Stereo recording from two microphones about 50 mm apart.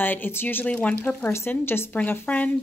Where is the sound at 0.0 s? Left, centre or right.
Left.